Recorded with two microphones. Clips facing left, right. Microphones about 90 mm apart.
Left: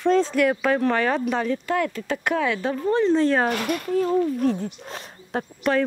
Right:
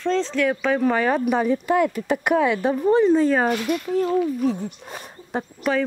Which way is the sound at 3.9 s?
Centre (ahead or behind).